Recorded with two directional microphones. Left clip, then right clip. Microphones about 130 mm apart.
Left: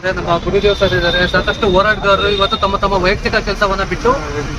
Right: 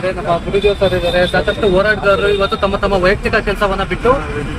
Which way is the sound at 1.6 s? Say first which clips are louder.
Even; centre (ahead or behind).